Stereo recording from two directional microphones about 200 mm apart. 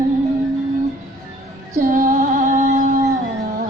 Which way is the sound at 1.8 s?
40° right (ahead or behind).